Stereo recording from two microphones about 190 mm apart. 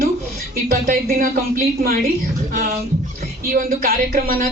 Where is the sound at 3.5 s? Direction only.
50° right (ahead or behind).